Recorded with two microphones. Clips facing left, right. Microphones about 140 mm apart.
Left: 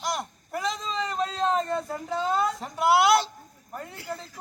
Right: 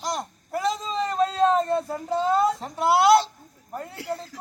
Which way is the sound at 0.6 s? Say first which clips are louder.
Right 4 dB; 5° right (ahead or behind).